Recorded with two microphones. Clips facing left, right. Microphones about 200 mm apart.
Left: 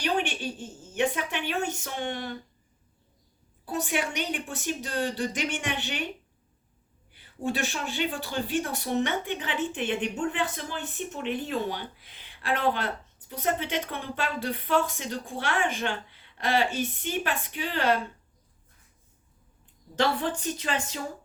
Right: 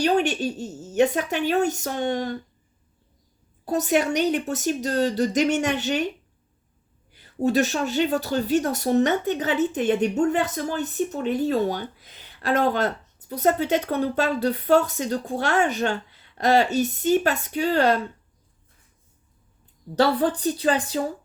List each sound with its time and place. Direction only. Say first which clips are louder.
0.0 s speech: right 7 dB; 40° right (ahead or behind)
3.7 s speech: right 8 dB; 40° right (ahead or behind)
7.4 s speech: right 9 dB; 40° right (ahead or behind)
20.0 s speech: right 6 dB; 35° right (ahead or behind)